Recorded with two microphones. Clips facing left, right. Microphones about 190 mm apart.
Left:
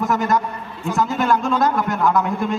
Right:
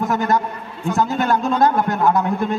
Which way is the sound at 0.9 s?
30° right (ahead or behind).